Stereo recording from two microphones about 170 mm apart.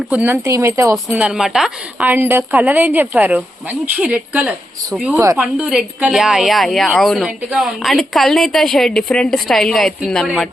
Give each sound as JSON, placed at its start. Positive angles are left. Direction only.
{"t": 0.1, "sound": "a woman's voice", "side_deg": -10}
{"t": 1.1, "sound": "a woman's voice", "side_deg": -5}